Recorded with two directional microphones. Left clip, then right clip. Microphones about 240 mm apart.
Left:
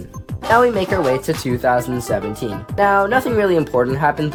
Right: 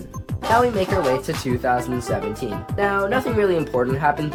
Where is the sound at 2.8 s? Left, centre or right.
Left.